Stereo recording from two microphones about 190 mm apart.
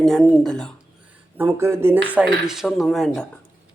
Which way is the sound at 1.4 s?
15° right (ahead or behind).